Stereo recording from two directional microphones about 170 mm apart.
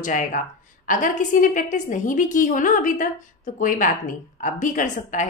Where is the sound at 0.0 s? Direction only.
50° left (ahead or behind).